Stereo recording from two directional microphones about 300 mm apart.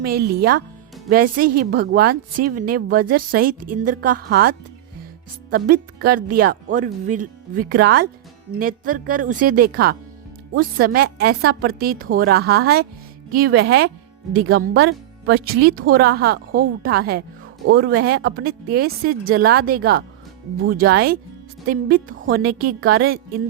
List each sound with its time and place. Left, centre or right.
0.0 s a woman's voice: right
14.7 s speech: right
15.4 s a woman's voice: right